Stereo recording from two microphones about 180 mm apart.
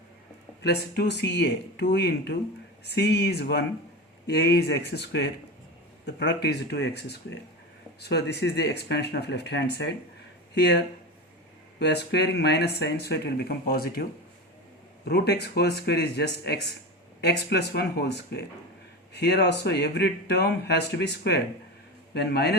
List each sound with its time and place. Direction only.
0.6 s speech: 70° left (ahead or behind)